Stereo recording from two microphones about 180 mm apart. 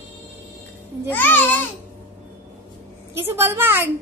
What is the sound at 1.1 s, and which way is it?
Speech, 10° left (ahead or behind).